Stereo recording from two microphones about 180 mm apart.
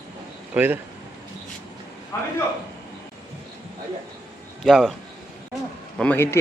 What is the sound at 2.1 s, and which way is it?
Speech, 15° left (ahead or behind).